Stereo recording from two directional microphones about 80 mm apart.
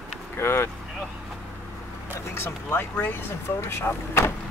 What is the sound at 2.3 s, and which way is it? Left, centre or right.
Speech, left.